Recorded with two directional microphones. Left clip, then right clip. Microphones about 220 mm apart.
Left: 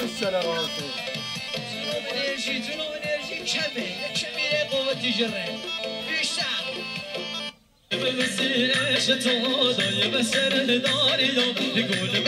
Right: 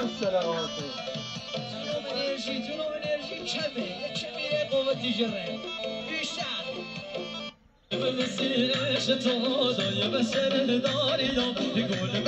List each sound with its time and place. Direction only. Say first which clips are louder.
0.0 s speech: left 2 dB; 25° left (ahead or behind)
1.9 s music: left 3 dB; 20° left (ahead or behind)
7.9 s music: left 4 dB; 10° left (ahead or behind); by 12.3 s 25° left (ahead or behind)